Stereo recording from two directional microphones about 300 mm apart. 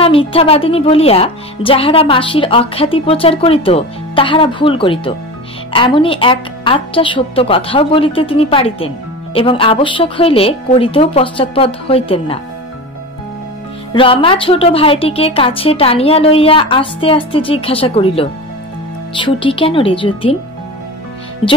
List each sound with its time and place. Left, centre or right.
0.0 s a woman's voice: centre
13.9 s a woman's voice: centre